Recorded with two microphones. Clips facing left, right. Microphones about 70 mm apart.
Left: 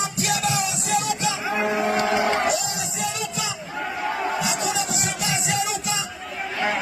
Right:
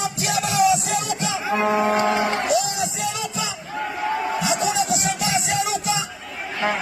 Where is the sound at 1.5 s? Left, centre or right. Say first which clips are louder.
Right 5 dB; centre.